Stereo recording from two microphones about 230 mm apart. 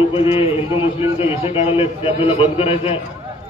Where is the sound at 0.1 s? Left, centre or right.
Left.